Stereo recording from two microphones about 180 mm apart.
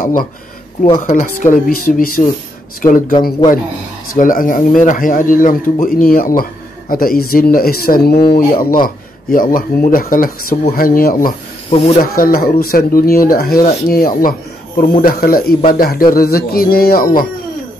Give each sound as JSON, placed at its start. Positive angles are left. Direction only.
{"t": 1.0, "sound": "speech", "side_deg": 45}
{"t": 4.2, "sound": "a man's voice", "side_deg": 50}
{"t": 11.7, "sound": "speech", "side_deg": 35}
{"t": 12.0, "sound": "a man's voice", "side_deg": 55}